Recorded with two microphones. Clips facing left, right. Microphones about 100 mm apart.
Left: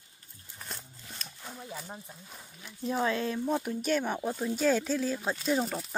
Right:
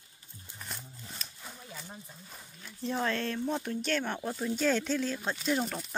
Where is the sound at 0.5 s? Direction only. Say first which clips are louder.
Left 1 dB; centre (ahead or behind).